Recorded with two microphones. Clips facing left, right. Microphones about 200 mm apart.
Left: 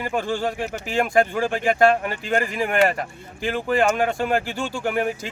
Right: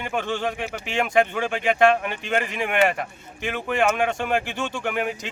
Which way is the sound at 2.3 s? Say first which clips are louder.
Left 2 dB; 40° left (ahead or behind).